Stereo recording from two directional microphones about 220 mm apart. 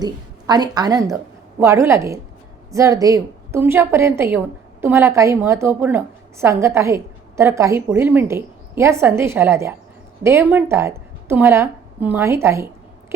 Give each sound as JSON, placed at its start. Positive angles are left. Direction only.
{"t": 0.0, "sound": "a woman's voice", "side_deg": -20}